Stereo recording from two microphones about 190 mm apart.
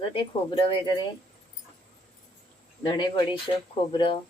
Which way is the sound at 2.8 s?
25° left (ahead or behind).